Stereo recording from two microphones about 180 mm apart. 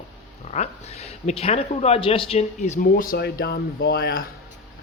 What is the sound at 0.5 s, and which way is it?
Speech, 35° left (ahead or behind).